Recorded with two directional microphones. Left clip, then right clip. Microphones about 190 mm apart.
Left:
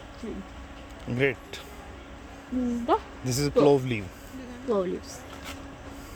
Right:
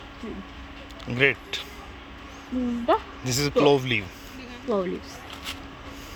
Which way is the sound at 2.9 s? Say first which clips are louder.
Right 3 dB; 15° right (ahead or behind).